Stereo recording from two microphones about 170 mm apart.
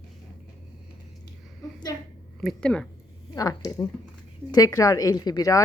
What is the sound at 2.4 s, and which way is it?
Speech, 5° left (ahead or behind).